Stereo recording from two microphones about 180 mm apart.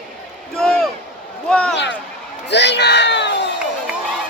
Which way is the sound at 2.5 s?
70° left (ahead or behind).